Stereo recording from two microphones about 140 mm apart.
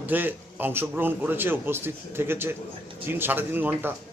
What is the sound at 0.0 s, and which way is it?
A man's voice, 15° right (ahead or behind).